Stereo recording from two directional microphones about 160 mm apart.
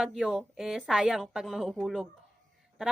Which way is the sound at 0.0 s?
5° right (ahead or behind).